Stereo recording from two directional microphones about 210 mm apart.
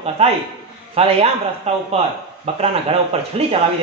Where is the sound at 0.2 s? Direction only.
30° right (ahead or behind).